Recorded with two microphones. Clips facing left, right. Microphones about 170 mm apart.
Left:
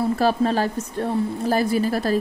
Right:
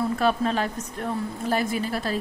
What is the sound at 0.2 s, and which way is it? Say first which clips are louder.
A woman's voice: left 4 dB; 35° left (ahead or behind).